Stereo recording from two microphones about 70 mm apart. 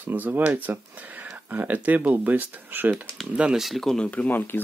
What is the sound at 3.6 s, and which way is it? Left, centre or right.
Speech, centre.